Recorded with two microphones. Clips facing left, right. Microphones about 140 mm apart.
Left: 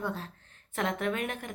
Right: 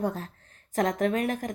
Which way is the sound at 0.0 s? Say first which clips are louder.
Right 5 dB; 45° right (ahead or behind).